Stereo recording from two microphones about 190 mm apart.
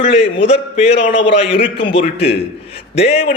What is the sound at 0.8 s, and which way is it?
A man's voice, 30° left (ahead or behind).